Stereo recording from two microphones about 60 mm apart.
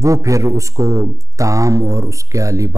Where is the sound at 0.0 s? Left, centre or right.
Right.